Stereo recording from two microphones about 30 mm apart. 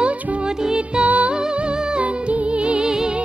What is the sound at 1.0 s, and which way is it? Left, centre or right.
Music, right.